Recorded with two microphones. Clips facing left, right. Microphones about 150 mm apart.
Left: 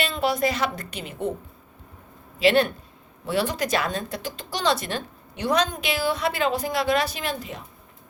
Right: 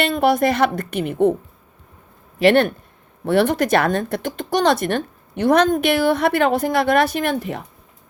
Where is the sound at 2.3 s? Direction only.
55° right (ahead or behind).